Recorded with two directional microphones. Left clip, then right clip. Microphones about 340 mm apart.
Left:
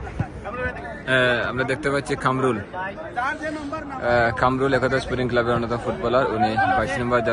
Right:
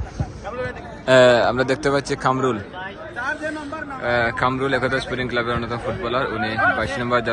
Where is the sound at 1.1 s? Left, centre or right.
Centre.